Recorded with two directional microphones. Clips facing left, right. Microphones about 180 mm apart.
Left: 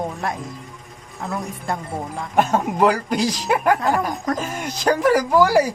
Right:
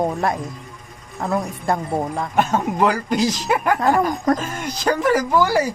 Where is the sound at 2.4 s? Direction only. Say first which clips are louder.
Left 1 dB; 5° left (ahead or behind).